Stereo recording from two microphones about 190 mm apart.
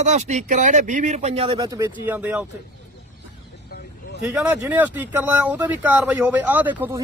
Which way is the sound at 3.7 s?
60° left (ahead or behind).